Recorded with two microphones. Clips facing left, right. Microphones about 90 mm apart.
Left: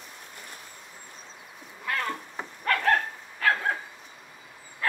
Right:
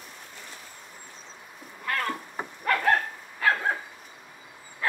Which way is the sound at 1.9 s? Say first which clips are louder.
Right 1 dB; centre (ahead or behind).